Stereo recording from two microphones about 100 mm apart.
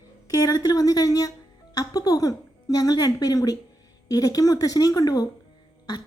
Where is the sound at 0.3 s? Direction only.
40° left (ahead or behind).